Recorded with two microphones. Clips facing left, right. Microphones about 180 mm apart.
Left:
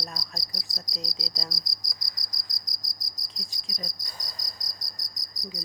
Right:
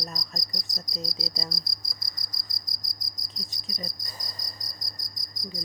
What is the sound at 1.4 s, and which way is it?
Cricket, 5° left (ahead or behind).